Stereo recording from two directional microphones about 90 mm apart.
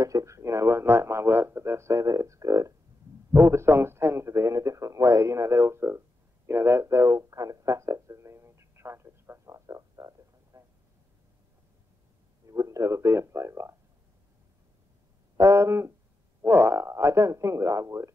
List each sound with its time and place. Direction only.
0.0 s speech: 35° right (ahead or behind)
12.4 s speech: 35° right (ahead or behind)
15.3 s speech: 35° right (ahead or behind)